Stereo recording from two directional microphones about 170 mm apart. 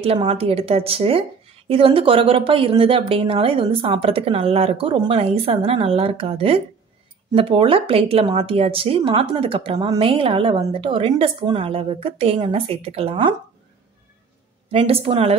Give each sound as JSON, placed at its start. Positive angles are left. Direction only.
{"t": 0.0, "sound": "a woman's voice", "side_deg": -35}
{"t": 14.7, "sound": "a woman's voice", "side_deg": -35}